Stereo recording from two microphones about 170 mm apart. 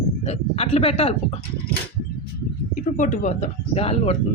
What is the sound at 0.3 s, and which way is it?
Speech, 35° left (ahead or behind).